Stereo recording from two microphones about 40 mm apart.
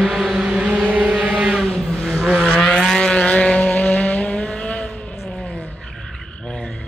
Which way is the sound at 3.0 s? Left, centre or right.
Left.